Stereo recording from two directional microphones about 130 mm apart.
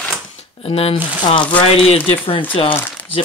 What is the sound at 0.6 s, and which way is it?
Speech, 50° left (ahead or behind).